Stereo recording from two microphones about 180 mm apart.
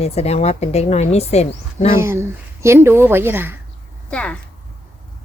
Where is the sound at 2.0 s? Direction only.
15° right (ahead or behind).